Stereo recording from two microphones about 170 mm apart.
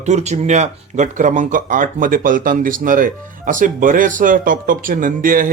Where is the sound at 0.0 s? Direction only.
40° right (ahead or behind).